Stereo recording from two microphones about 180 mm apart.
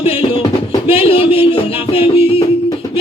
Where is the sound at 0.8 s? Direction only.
30° left (ahead or behind).